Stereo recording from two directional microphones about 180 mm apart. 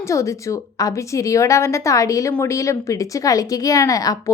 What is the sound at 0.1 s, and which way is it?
A woman's voice, 15° left (ahead or behind).